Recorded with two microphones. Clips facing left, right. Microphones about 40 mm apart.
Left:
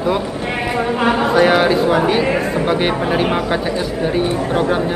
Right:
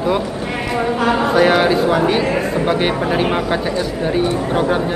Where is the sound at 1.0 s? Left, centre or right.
Centre.